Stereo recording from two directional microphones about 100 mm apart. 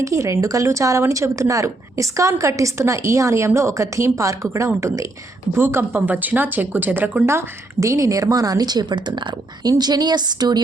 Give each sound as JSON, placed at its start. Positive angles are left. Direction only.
{"t": 0.0, "sound": "a woman's voice", "side_deg": -30}
{"t": 5.5, "sound": "a woman's voice", "side_deg": -20}